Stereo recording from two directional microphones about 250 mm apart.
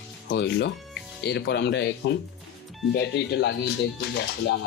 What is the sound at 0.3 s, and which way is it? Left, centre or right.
A man's voice, left.